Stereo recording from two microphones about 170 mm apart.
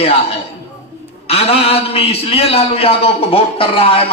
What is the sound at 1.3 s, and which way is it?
A man's voice, 35° left (ahead or behind).